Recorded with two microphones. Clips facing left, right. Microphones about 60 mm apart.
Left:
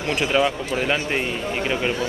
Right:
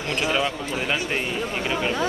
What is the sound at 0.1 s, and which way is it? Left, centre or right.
Speech, centre.